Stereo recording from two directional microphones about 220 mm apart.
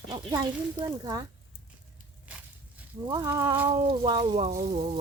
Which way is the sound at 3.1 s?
15° right (ahead or behind).